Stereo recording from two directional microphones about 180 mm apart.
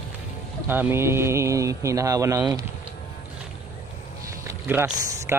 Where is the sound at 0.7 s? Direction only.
10° right (ahead or behind).